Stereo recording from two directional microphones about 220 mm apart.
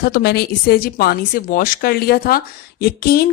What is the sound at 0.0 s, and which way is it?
Speech, 45° left (ahead or behind).